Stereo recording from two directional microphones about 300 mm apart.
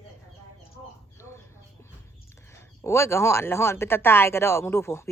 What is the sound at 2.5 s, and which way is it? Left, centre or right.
Speech, centre.